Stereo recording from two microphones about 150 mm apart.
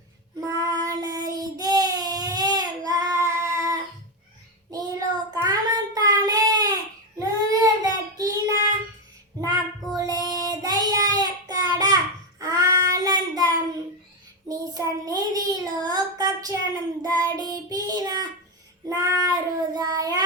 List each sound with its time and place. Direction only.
0.3 s child singing: 25° right (ahead or behind)
9.9 s child singing: 25° right (ahead or behind)
14.4 s child singing: 25° right (ahead or behind)